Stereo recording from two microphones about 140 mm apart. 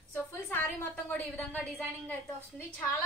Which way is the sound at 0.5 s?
15° left (ahead or behind).